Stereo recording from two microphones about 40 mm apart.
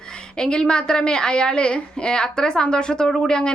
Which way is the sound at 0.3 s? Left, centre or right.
Left.